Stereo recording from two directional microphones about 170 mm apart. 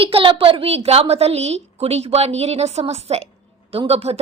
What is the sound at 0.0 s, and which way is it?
A woman's voice, 30° right (ahead or behind).